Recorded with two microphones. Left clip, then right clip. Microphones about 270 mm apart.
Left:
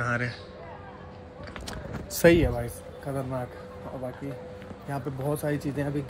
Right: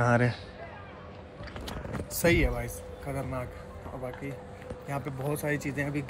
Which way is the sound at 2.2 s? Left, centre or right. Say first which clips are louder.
Left 6 dB; left.